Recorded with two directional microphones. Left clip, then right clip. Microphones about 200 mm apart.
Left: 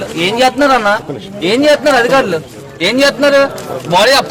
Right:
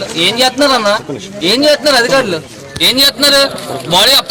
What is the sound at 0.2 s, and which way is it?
A man's voice, centre (ahead or behind).